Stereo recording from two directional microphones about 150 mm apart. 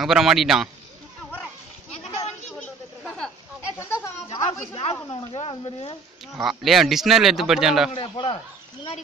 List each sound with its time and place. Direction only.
0.0 s speech: 5° right (ahead or behind)
2.0 s a sound: 45° left (ahead or behind)
4.3 s speech: 40° left (ahead or behind)
6.4 s speech: centre (ahead or behind)
7.9 s a man's voice: 35° left (ahead or behind)